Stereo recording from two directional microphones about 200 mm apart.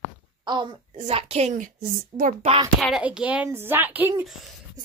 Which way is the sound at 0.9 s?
35° right (ahead or behind).